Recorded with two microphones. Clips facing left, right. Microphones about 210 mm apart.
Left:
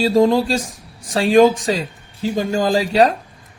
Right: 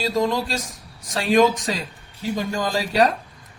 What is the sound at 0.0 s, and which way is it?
Speech, 30° left (ahead or behind).